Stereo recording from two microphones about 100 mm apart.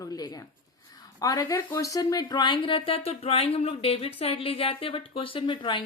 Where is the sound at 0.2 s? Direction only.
40° left (ahead or behind).